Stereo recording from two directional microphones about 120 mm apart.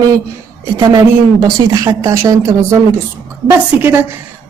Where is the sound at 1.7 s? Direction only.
35° right (ahead or behind).